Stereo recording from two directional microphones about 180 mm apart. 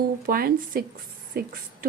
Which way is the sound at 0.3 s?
55° right (ahead or behind).